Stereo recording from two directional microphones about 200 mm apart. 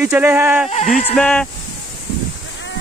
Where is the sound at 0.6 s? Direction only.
35° left (ahead or behind).